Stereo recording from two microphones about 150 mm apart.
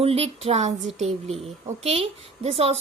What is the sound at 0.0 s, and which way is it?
A woman's voice, 40° right (ahead or behind).